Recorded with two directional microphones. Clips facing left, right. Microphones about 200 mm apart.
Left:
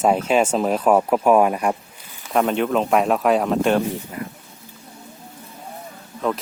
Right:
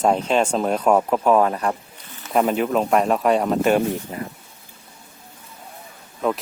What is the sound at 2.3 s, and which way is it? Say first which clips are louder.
Speech: even; 5° right (ahead or behind).